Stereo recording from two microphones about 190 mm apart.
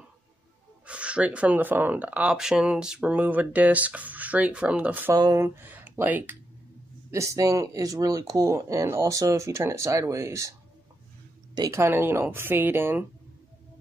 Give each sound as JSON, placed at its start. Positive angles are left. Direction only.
{"t": 0.8, "sound": "speech", "side_deg": -5}
{"t": 11.5, "sound": "speech", "side_deg": -15}